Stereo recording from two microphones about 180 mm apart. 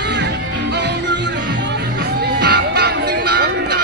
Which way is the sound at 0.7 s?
75° right (ahead or behind).